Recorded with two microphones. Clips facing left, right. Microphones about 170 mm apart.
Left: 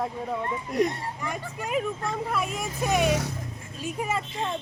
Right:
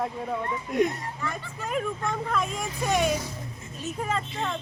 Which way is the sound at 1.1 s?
15° left (ahead or behind).